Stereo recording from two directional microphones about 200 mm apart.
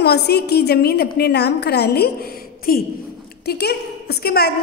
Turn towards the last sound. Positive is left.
turn(degrees=55)  # may be behind; listen again after turning